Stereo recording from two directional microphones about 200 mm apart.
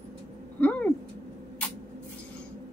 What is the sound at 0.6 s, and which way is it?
Cat, 10° left (ahead or behind).